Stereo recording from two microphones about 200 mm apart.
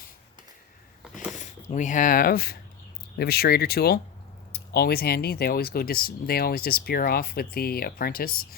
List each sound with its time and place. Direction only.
1.3 s speech: 40° left (ahead or behind)